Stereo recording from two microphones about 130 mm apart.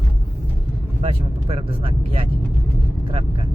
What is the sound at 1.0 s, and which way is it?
Speech, 50° right (ahead or behind).